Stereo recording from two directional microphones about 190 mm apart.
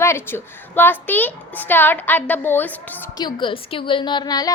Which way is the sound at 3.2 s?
25° left (ahead or behind).